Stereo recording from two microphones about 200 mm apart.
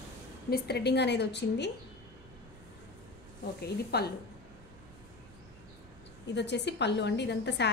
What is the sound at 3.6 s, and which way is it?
Speech, 55° left (ahead or behind).